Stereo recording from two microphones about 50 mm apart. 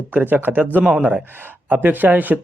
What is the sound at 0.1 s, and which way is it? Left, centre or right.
Speech, right.